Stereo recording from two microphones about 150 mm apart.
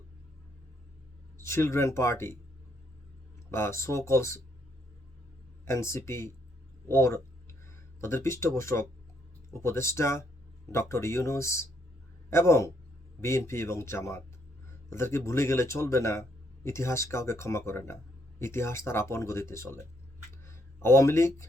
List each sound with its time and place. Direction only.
1.4 s speech: 20° left (ahead or behind)
3.5 s speech: 15° left (ahead or behind)
5.6 s speech: 20° left (ahead or behind)
6.8 s a sound: 20° left (ahead or behind)
8.0 s speech: 15° left (ahead or behind)
20.4 s a sound: 20° left (ahead or behind)